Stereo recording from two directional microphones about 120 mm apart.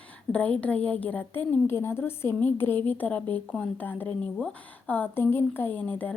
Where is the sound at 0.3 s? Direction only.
10° left (ahead or behind).